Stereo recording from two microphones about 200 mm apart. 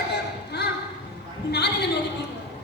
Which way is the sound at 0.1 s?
55° left (ahead or behind).